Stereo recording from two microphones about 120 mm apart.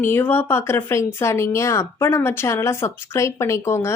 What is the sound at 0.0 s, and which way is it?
A woman's voice, 15° left (ahead or behind).